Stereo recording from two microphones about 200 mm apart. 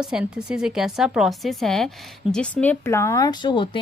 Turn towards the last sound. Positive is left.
turn(degrees=25)  # may be behind; listen again after turning